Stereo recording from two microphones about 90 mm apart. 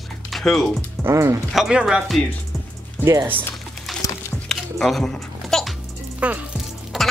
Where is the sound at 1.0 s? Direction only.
30° right (ahead or behind).